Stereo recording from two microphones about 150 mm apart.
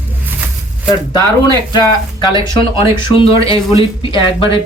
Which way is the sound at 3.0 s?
35° left (ahead or behind).